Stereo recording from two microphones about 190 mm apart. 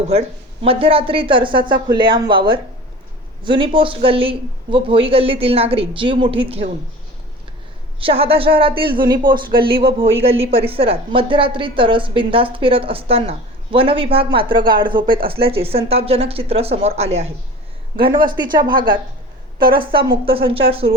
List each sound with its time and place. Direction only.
0.6 s speech: 30° right (ahead or behind)
7.9 s speech: 30° right (ahead or behind)
19.7 s speech: 25° right (ahead or behind)